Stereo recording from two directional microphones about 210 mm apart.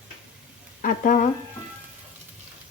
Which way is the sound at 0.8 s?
40° left (ahead or behind).